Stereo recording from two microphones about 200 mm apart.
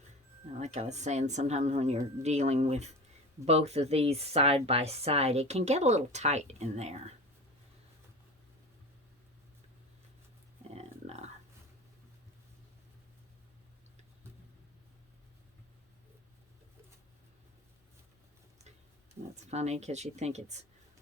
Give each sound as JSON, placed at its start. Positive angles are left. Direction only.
{"t": 0.6, "sound": "speech", "side_deg": -35}
{"t": 11.0, "sound": "a sound", "side_deg": -35}
{"t": 19.5, "sound": "speech", "side_deg": -35}